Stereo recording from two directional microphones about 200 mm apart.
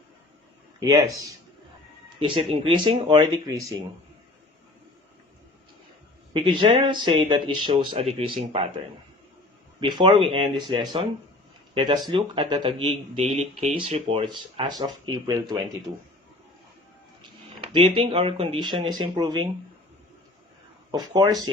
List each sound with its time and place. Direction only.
0.9 s speech: 15° right (ahead or behind)
6.3 s speech: 25° right (ahead or behind)
9.8 s speech: 25° right (ahead or behind)
17.7 s speech: 25° right (ahead or behind)
20.9 s speech: 20° right (ahead or behind)